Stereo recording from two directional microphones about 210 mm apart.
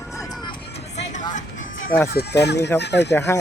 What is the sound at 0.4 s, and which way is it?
Music, 25° left (ahead or behind).